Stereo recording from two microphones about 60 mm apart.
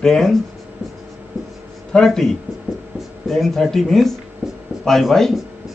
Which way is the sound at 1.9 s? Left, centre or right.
Centre.